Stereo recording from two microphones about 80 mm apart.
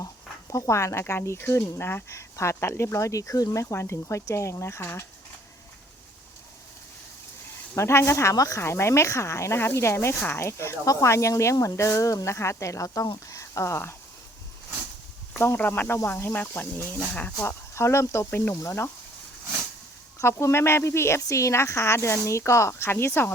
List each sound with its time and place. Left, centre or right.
0.5 s speech: left
7.8 s speech: left
13.3 s a sound: left
15.5 s speech: left
17.5 s speech: left
18.3 s speech: left
20.2 s speech: left